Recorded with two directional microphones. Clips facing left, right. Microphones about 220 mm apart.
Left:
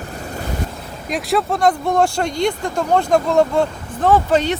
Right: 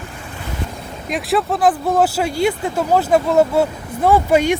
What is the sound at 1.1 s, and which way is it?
Speech, centre (ahead or behind).